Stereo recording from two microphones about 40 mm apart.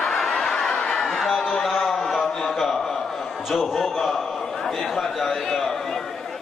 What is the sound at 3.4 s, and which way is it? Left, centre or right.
A man's voice, centre.